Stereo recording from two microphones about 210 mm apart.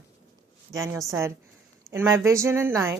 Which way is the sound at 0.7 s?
15° right (ahead or behind).